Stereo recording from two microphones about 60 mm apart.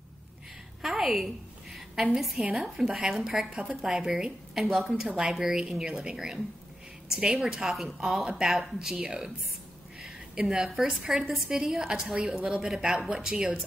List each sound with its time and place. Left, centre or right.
0.8 s a woman's voice: centre
3.4 s a woman's voice: right
3.8 s a woman's voice: centre